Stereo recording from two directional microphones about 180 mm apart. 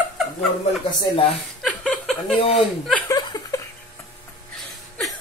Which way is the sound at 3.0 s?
20° left (ahead or behind).